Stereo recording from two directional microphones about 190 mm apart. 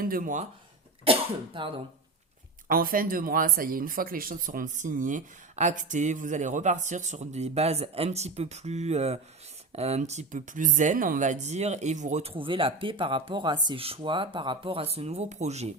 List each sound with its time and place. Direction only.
0.0 s speech: 50° right (ahead or behind)
1.5 s speech: 25° right (ahead or behind)
2.6 s speech: 50° right (ahead or behind)